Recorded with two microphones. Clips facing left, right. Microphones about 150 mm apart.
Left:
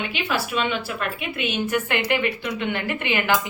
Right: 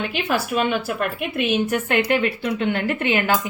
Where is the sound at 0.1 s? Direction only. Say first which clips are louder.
Right 3 dB; 45° right (ahead or behind).